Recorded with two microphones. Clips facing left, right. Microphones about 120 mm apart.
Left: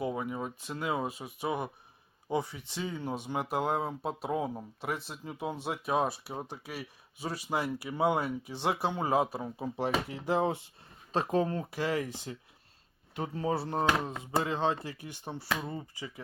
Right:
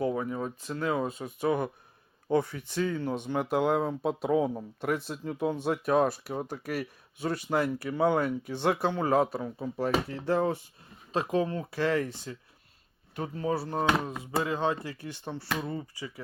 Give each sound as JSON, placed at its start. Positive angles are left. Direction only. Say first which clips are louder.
{"t": 0.0, "sound": "speech", "louder": "right 4 dB", "side_deg": 15}
{"t": 1.2, "sound": "speech", "louder": "right 5 dB", "side_deg": 5}
{"t": 8.9, "sound": "speech", "louder": "right 3 dB", "side_deg": 15}
{"t": 11.1, "sound": "speech", "louder": "right 1 dB", "side_deg": 30}
{"t": 11.7, "sound": "speech", "louder": "right 4 dB", "side_deg": 15}
{"t": 13.1, "sound": "speech", "louder": "right 1 dB", "side_deg": 25}
{"t": 15.2, "sound": "speech", "louder": "right 1 dB", "side_deg": 15}